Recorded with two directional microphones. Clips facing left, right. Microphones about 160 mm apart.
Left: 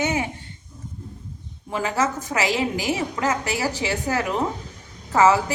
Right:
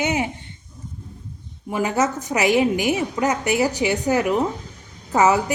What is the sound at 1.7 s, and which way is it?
A woman's voice, 20° right (ahead or behind).